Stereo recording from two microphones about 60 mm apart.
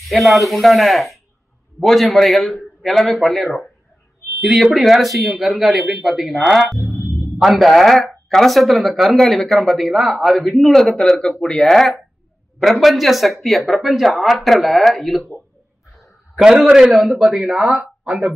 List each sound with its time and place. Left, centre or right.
0.1 s speech: centre
16.0 s a sound: centre
16.9 s speech: centre
17.7 s speech: centre